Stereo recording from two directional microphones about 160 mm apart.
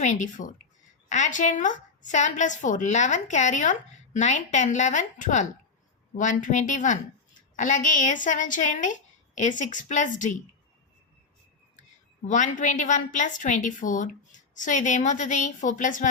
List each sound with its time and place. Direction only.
0.0 s a woman's voice: 50° left (ahead or behind)
12.2 s a woman's voice: 50° left (ahead or behind)